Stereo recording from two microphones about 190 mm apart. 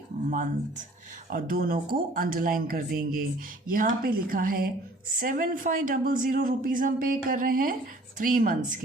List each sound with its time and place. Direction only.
1.3 s a woman's voice: 50° right (ahead or behind)